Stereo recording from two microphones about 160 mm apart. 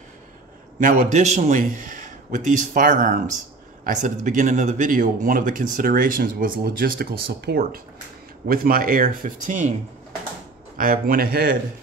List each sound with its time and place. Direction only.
0.7 s a man's voice: 50° right (ahead or behind)
10.8 s speech: 65° right (ahead or behind)